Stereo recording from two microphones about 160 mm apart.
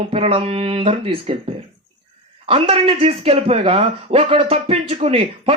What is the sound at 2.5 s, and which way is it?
Speech, 35° right (ahead or behind).